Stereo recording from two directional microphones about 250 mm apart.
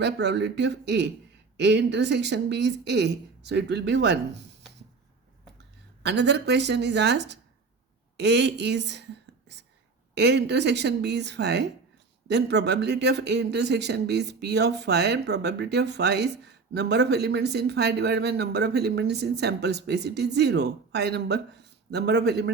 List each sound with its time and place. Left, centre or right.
0.0 s speech: right
6.0 s speech: right
10.2 s speech: right